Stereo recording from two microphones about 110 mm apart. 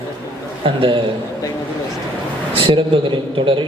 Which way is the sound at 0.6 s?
50° right (ahead or behind).